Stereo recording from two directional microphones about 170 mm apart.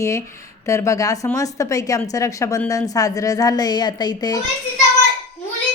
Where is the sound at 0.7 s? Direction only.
15° left (ahead or behind).